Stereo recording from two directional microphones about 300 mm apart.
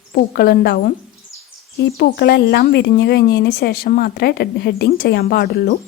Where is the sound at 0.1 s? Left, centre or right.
Left.